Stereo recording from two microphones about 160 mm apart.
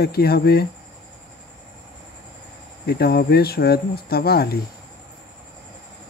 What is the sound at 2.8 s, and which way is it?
Speech, 75° left (ahead or behind).